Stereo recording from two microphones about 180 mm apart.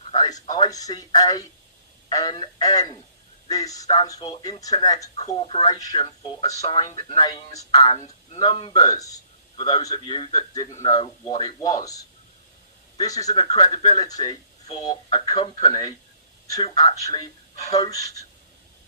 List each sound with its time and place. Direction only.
0.1 s a sound: 20° left (ahead or behind)
2.0 s a man's voice: 25° left (ahead or behind)
5.0 s a man's voice: 35° left (ahead or behind); by 6.1 s 20° left (ahead or behind)
6.7 s speech: 35° left (ahead or behind)
7.2 s a man's voice: 20° left (ahead or behind)
7.9 s a man's voice: 35° left (ahead or behind)
10.7 s speech: 35° left (ahead or behind)
10.9 s a man's voice: 25° left (ahead or behind)
13.0 s a man's voice: 20° left (ahead or behind)
14.3 s speech: 35° left (ahead or behind)
15.4 s a man's voice: 20° left (ahead or behind)